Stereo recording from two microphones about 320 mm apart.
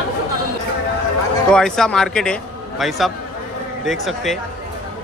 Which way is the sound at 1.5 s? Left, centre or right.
Centre.